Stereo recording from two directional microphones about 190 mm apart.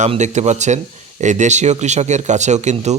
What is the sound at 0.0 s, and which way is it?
A man's voice, 40° right (ahead or behind).